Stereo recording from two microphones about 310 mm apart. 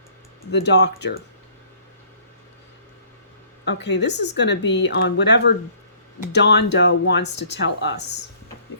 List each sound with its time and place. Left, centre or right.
0.5 s speech: left
3.7 s speech: left